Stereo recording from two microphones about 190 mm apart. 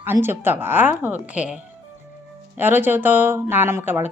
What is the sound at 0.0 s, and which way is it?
A woman's voice, 10° right (ahead or behind).